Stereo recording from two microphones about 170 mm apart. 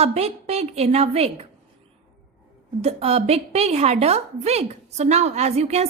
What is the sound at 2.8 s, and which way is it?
A woman's voice, 35° right (ahead or behind).